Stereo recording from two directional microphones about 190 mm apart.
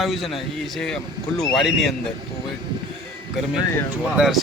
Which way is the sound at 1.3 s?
Centre (ahead or behind).